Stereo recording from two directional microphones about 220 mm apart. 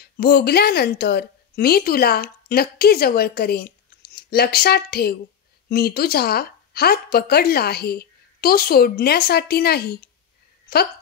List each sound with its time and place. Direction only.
0.0 s a woman's voice: 45° left (ahead or behind)